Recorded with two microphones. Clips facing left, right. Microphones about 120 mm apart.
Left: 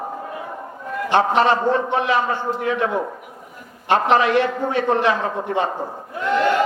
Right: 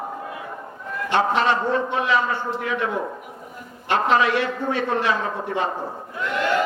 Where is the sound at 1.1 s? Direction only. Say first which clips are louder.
Left 3 dB; 35° left (ahead or behind).